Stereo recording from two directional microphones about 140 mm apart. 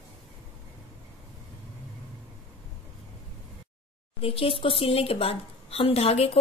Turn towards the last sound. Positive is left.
turn(degrees=45)  # may be behind; listen again after turning